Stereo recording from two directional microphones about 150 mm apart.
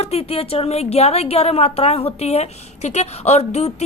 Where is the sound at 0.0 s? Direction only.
40° left (ahead or behind).